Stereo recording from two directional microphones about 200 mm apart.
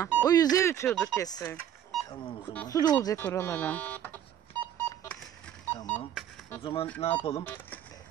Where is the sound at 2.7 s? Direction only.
15° left (ahead or behind).